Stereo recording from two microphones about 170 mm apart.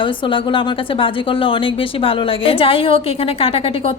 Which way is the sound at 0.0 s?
30° left (ahead or behind).